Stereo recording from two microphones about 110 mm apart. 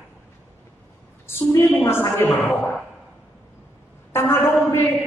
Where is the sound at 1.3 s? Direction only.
25° left (ahead or behind).